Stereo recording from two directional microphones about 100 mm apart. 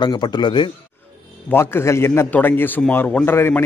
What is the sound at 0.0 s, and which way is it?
Speech, 45° left (ahead or behind).